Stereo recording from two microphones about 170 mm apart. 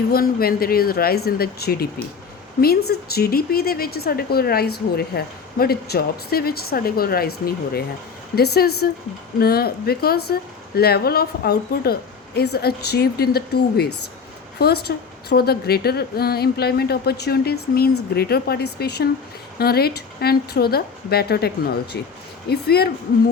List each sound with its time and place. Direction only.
0.1 s a woman's voice: 60° left (ahead or behind)